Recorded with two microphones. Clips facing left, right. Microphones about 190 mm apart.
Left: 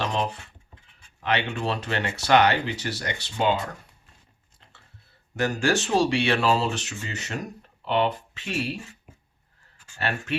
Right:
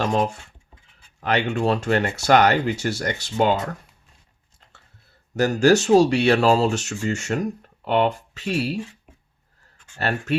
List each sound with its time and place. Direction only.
0.0 s speech: 45° right (ahead or behind)
5.4 s speech: 40° right (ahead or behind)
10.0 s speech: 40° right (ahead or behind)